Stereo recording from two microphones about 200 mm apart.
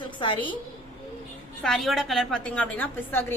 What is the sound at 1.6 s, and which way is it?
A woman's voice, centre (ahead or behind).